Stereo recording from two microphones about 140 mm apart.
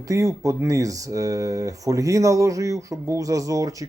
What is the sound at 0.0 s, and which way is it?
Speech, 25° right (ahead or behind).